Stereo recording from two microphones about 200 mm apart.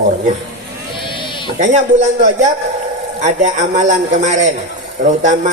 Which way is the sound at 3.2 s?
35° right (ahead or behind).